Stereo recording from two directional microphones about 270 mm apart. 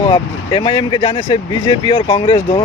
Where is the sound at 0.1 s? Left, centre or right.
Centre.